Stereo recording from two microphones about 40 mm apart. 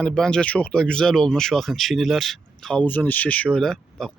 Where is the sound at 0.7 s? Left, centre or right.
Centre.